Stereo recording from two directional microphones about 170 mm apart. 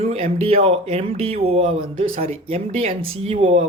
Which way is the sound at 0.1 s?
35° right (ahead or behind).